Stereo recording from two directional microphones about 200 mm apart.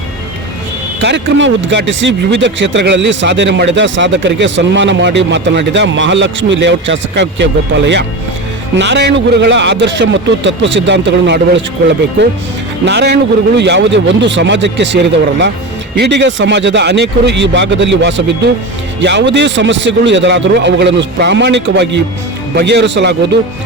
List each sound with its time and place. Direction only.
0.9 s speech: 65° right (ahead or behind)
12.8 s speech: 60° right (ahead or behind)